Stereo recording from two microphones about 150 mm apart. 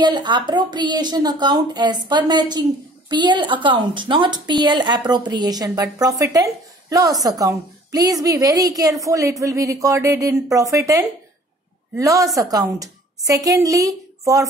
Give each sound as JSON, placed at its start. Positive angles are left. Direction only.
{"t": 0.0, "sound": "a woman's voice", "side_deg": -30}